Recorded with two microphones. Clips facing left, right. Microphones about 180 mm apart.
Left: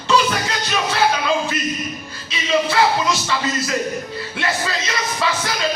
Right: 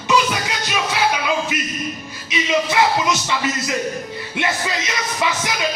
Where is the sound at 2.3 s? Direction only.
20° right (ahead or behind).